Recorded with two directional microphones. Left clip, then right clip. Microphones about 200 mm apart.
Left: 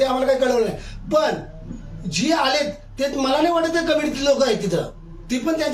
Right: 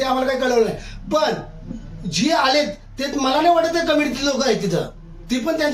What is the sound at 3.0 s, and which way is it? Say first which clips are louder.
Speech: even; centre (ahead or behind).